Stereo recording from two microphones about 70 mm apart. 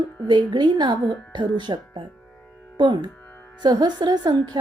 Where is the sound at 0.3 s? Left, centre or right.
Right.